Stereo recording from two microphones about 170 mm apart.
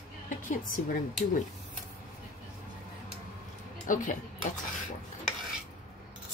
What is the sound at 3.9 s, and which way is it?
Speech, 50° left (ahead or behind).